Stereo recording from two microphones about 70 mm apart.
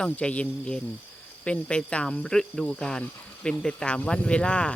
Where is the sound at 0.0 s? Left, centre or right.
Centre.